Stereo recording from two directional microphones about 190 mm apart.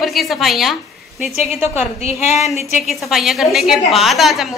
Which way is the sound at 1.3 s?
35° left (ahead or behind).